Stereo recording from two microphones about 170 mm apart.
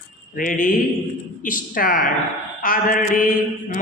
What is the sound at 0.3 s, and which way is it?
A man's voice, 50° left (ahead or behind).